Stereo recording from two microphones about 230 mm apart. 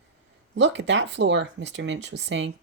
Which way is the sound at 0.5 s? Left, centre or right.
Right.